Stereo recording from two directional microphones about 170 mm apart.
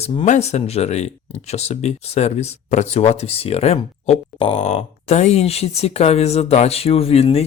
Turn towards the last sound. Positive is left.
turn(degrees=35)  # may be behind; listen again after turning